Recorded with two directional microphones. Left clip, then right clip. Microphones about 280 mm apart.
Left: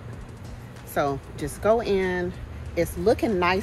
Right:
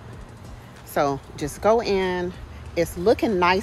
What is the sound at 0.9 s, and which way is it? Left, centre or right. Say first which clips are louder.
Speech: right 3 dB; right.